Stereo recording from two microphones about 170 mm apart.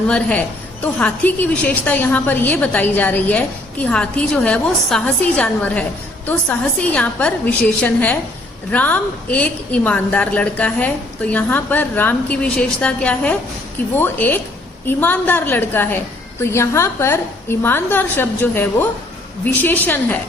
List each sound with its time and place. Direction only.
0.1 s a woman's voice: 5° left (ahead or behind)